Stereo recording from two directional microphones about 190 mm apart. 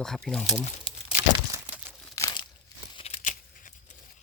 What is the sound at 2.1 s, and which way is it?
Crumpling, 20° left (ahead or behind).